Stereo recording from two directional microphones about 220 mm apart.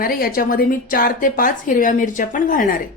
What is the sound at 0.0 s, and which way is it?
A woman's voice, 40° left (ahead or behind).